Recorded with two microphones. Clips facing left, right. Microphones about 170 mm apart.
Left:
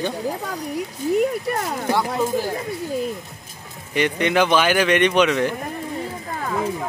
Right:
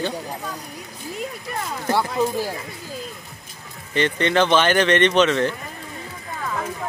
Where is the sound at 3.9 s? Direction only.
10° left (ahead or behind).